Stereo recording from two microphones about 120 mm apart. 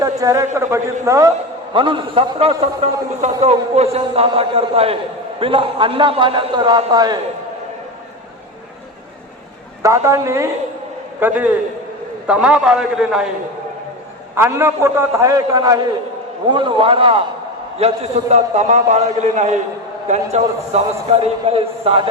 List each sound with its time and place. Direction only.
0.0 s a man's voice: 25° right (ahead or behind)
1.7 s a man's voice: 45° right (ahead or behind)
9.8 s a man's voice: 25° right (ahead or behind)
11.2 s a man's voice: 15° right (ahead or behind)
14.3 s a man's voice: 20° right (ahead or behind)
16.5 s a man's voice: 40° right (ahead or behind); by 19.5 s 80° right
20.3 s a man's voice: 60° right (ahead or behind)